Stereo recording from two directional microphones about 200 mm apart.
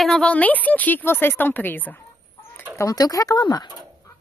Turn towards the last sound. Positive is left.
turn(degrees=20)  # may be behind; listen again after turning